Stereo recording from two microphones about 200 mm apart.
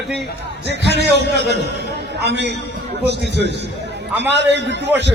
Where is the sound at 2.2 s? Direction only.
60° right (ahead or behind).